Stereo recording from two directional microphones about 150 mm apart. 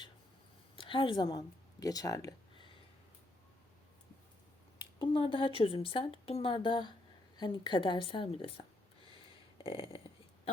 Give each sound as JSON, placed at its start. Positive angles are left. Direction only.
{"t": 0.8, "sound": "speech", "side_deg": 35}
{"t": 4.9, "sound": "speech", "side_deg": 35}
{"t": 9.6, "sound": "speech", "side_deg": 35}